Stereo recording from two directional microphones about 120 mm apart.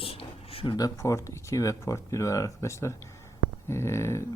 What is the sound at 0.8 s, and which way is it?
Speech, 30° left (ahead or behind).